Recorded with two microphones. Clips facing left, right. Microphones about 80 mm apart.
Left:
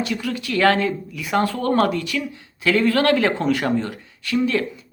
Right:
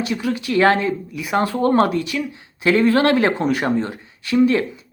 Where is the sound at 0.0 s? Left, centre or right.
Right.